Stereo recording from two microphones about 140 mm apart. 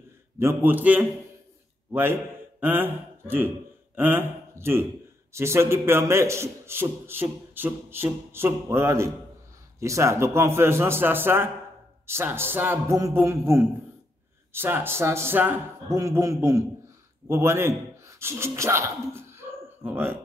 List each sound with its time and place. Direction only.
0.4 s a man's voice: 15° right (ahead or behind)
15.9 s a man's voice: 25° right (ahead or behind)